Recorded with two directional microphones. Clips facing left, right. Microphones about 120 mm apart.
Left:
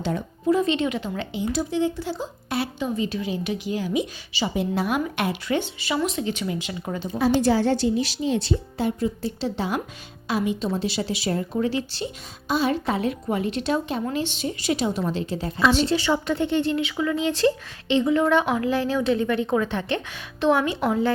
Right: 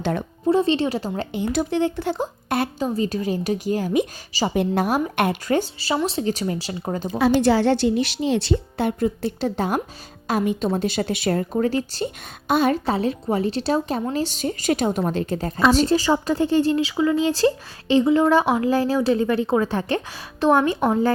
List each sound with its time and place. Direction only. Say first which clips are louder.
0.0 s a woman's voice: right 3 dB; 65° right (ahead or behind)
0.4 s a woman's voice: right 2 dB; 30° right (ahead or behind)
1.4 s a woman's voice: right 2 dB; 60° right (ahead or behind)
2.8 s a woman's voice: right 3 dB; 40° right (ahead or behind)
7.4 s a woman's voice: right 3 dB; 75° right (ahead or behind); by 11.4 s 55° right (ahead or behind)
11.5 s a woman's voice: right 3 dB; 45° right (ahead or behind)
12.5 s a woman's voice: right 4 dB; 55° right (ahead or behind)
12.8 s a woman's voice: right 2 dB; 35° right (ahead or behind)